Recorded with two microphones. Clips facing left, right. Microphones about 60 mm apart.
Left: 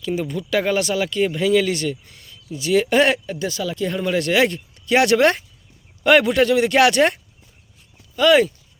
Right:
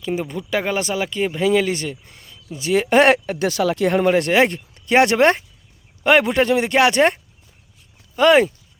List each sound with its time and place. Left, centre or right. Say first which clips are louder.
0.0 s speech: even; right
2.9 s speech: right 3 dB; right
4.0 s speech: right 1 dB; right